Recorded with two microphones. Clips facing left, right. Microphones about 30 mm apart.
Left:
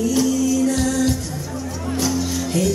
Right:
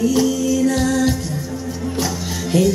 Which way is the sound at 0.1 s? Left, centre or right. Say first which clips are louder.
Right 1 dB; centre.